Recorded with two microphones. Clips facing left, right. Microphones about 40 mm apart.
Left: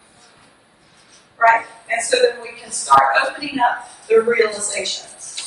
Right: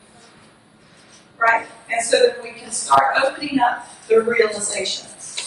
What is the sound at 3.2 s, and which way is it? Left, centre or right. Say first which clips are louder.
A man's voice: even; centre.